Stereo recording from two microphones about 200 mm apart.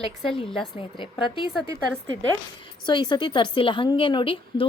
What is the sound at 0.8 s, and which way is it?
Speech, 25° left (ahead or behind).